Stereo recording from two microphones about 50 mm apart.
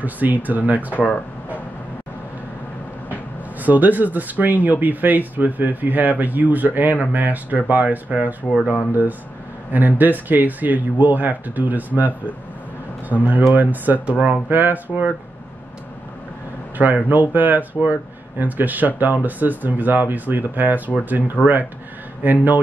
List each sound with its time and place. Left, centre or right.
0.0 s speech: right
0.9 s a sound: left
3.6 s speech: right
9.7 s speech: right
13.1 s speech: right
16.7 s a man's voice: right
21.4 s speech: left
22.2 s speech: right